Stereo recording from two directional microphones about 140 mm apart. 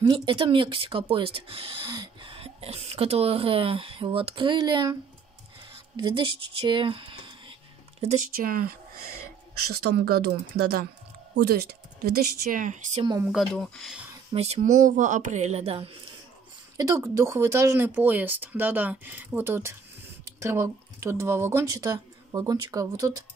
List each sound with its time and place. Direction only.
0.0 s speech: 35° right (ahead or behind)
5.9 s speech: 35° right (ahead or behind)
8.0 s speech: 60° right (ahead or behind); by 10.9 s 90° right
12.0 s speech: 80° right; by 13.0 s 60° right (ahead or behind)
13.3 s speech: centre (ahead or behind)
14.3 s speech: 50° right (ahead or behind)
16.7 s speech: 20° right (ahead or behind)